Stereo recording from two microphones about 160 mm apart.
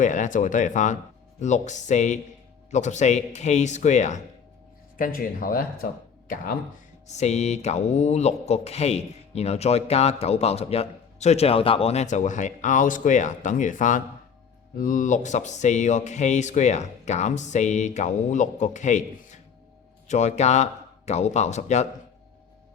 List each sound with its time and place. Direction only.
0.0 s speech: 50° left (ahead or behind)
4.9 s speech: 60° left (ahead or behind)
7.1 s speech: 45° left (ahead or behind)